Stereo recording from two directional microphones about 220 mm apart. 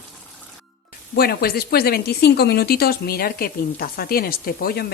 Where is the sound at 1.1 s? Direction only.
45° left (ahead or behind).